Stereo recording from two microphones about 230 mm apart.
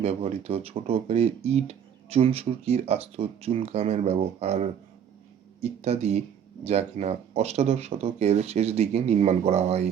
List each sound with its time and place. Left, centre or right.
0.0 s speech: right